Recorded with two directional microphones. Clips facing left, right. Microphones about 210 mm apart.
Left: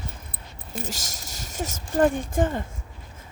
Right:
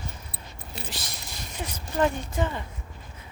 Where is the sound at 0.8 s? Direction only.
45° left (ahead or behind).